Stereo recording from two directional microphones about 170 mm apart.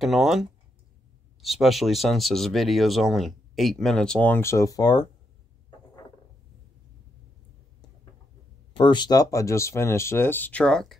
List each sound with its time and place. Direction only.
0.0 s speech: centre (ahead or behind); by 5.0 s 20° left (ahead or behind)
8.7 s speech: 25° left (ahead or behind); by 11.0 s 5° left (ahead or behind)